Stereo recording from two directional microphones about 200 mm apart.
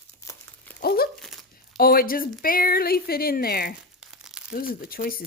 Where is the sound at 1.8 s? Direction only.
50° left (ahead or behind).